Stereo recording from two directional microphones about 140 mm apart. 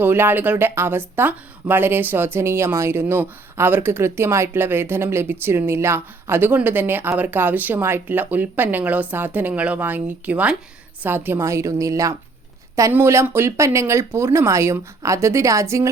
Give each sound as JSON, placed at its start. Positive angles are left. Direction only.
{"t": 0.0, "sound": "speech", "side_deg": -15}